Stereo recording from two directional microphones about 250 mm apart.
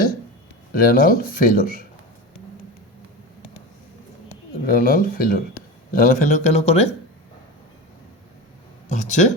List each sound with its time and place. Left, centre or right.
0.7 s speech: left
4.6 s speech: left
8.9 s speech: left